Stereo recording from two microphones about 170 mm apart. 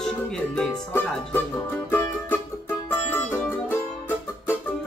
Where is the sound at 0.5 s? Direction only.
10° left (ahead or behind).